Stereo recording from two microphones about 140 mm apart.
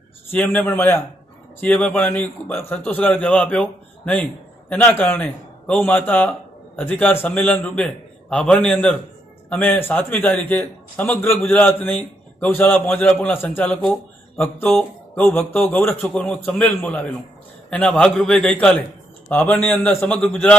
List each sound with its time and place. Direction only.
0.3 s a man's voice: 10° left (ahead or behind)